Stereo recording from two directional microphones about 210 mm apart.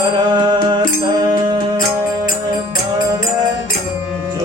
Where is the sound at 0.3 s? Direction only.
20° right (ahead or behind).